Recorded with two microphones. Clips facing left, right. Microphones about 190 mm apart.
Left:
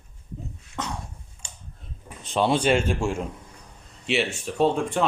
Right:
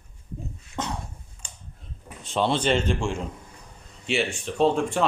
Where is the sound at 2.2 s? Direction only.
10° left (ahead or behind).